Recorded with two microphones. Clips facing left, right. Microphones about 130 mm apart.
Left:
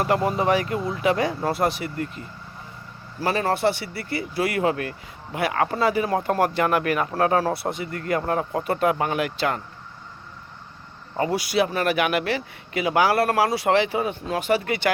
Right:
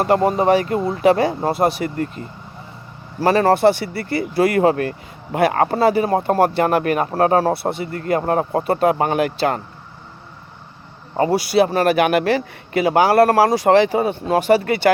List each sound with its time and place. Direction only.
0.0 s speech: 35° right (ahead or behind)
2.2 s speech: 40° right (ahead or behind)
11.2 s speech: 35° right (ahead or behind)